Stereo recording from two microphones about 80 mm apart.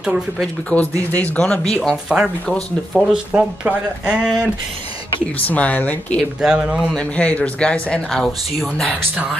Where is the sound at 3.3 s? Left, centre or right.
Centre.